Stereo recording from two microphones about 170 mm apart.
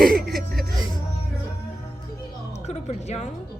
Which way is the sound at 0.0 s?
60° right (ahead or behind).